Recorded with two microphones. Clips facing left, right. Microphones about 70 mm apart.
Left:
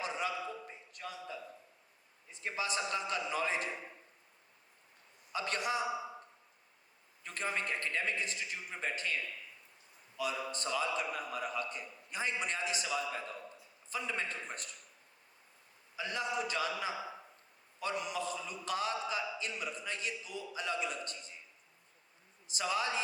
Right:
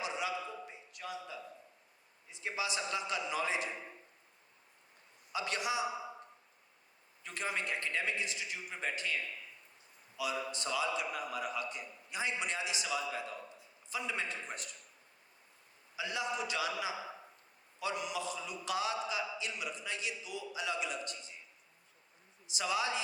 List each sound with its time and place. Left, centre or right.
0.0 s a sound: left
2.3 s a man's voice: left
5.3 s a man's voice: left
7.3 s a man's voice: left
10.2 s a man's voice: left
16.0 s a man's voice: left
22.4 s a man's voice: left